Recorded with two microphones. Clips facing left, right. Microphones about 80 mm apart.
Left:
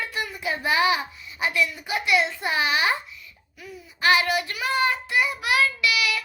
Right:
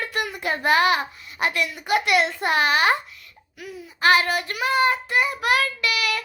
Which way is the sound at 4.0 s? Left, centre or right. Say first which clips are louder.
Right 2 dB; right.